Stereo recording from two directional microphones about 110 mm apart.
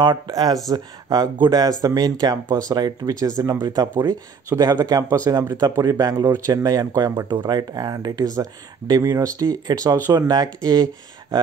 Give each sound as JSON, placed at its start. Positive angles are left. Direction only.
{"t": 0.0, "sound": "speech", "side_deg": -40}